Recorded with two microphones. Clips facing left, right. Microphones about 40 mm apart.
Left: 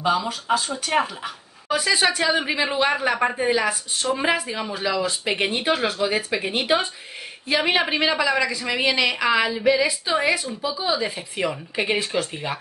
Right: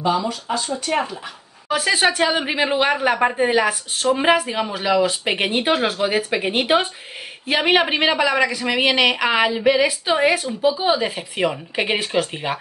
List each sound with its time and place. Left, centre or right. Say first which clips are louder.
0.2 s speech: even; centre
1.7 s a woman's voice: right 2 dB; right
3.5 s a woman's voice: right 4 dB; right
5.3 s a woman's voice: left 1 dB; right